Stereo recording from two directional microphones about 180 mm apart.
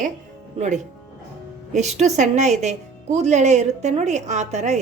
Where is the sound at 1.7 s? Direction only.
40° right (ahead or behind).